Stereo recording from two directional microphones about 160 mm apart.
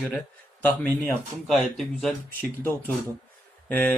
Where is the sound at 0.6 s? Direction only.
10° left (ahead or behind).